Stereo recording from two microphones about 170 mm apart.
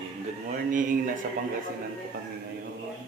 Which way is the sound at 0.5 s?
50° right (ahead or behind).